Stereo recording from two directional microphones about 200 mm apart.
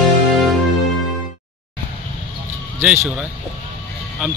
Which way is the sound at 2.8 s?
5° right (ahead or behind).